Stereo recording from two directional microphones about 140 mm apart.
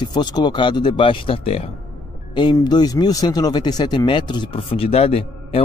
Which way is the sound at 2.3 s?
30° left (ahead or behind).